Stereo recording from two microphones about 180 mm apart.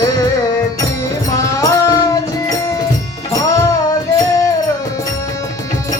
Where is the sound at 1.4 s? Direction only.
15° left (ahead or behind).